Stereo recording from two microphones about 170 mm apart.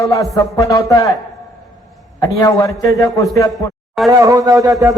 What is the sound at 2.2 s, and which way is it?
A man's voice, 20° left (ahead or behind).